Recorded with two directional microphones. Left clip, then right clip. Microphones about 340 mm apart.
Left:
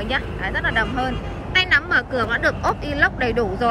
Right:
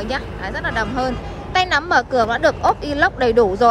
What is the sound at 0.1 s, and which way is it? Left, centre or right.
Speech, centre.